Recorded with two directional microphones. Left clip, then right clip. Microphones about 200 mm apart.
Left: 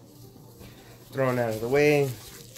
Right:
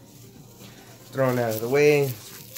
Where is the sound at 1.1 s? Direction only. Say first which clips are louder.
Right 2 dB; 5° left (ahead or behind).